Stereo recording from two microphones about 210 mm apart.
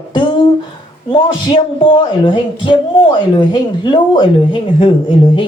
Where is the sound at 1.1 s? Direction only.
25° left (ahead or behind).